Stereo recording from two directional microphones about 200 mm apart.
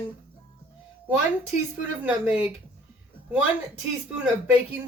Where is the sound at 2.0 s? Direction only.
5° right (ahead or behind).